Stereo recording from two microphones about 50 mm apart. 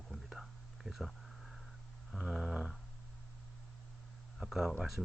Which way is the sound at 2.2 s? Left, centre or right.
Centre.